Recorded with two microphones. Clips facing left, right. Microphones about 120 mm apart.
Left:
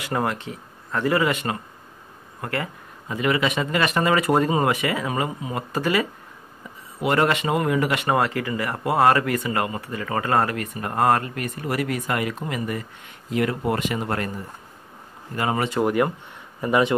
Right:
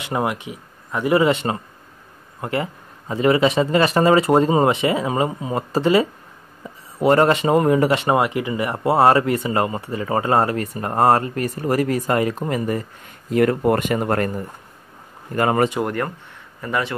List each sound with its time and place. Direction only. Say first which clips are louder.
0.0 s speech: right 2 dB; 15° right (ahead or behind)
8.2 s speech: right 3 dB; 20° right (ahead or behind); by 12.8 s 40° right (ahead or behind)
13.3 s speech: right 6 dB; 50° right (ahead or behind)
15.3 s speech: right 6 dB; 50° right (ahead or behind)
15.8 s speech: left 3 dB; 10° left (ahead or behind)